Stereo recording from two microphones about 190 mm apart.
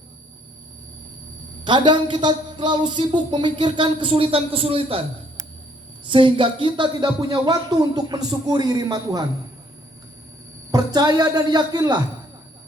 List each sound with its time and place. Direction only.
1.6 s speech: 25° right (ahead or behind)
6.1 s speech: 25° right (ahead or behind)
10.7 s speech: 20° right (ahead or behind)